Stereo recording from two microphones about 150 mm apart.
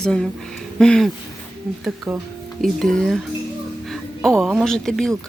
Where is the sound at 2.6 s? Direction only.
Centre (ahead or behind).